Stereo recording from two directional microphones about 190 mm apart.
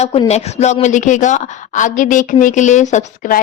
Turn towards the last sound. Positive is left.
turn(degrees=40)  # may be behind; listen again after turning